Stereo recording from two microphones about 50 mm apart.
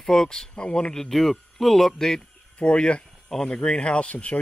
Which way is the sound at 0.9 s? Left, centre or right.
Centre.